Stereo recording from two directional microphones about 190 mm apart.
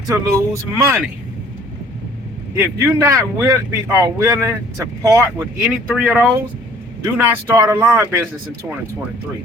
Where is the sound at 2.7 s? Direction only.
15° right (ahead or behind).